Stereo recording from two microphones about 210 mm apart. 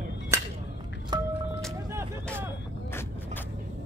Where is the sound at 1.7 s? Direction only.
10° right (ahead or behind).